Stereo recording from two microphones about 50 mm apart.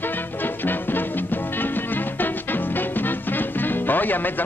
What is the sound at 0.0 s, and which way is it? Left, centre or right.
Music, left.